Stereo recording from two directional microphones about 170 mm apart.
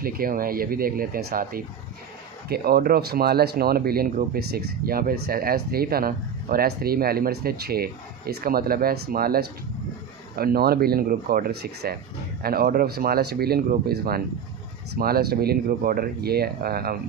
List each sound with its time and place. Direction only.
0.0 s speech: 60° right (ahead or behind)